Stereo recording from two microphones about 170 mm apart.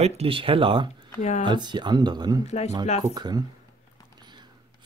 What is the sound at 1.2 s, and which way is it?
Speech, 45° left (ahead or behind).